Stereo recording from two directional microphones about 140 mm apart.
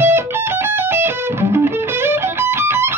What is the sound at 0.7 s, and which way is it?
Music, 15° right (ahead or behind).